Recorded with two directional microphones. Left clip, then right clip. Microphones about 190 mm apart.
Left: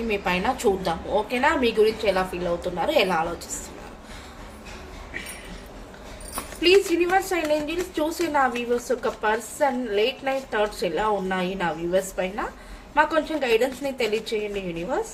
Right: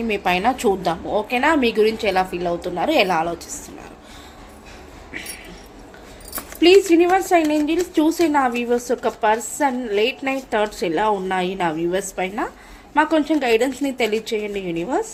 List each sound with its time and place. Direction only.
0.1 s a woman's voice: 40° right (ahead or behind)
6.6 s a woman's voice: 40° right (ahead or behind)